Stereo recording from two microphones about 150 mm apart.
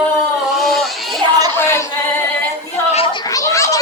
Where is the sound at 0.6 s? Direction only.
Centre (ahead or behind).